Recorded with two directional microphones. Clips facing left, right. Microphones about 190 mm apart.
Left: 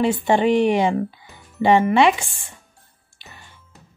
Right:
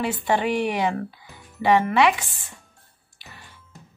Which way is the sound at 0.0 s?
25° left (ahead or behind).